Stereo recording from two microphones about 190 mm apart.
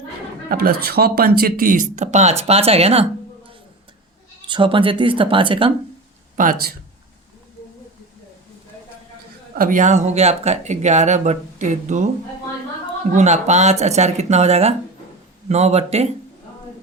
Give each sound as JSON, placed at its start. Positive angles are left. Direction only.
{"t": 0.5, "sound": "speech", "side_deg": -55}
{"t": 4.4, "sound": "speech", "side_deg": -25}
{"t": 6.3, "sound": "speech", "side_deg": -45}
{"t": 9.6, "sound": "speech", "side_deg": -45}
{"t": 13.1, "sound": "speech", "side_deg": -35}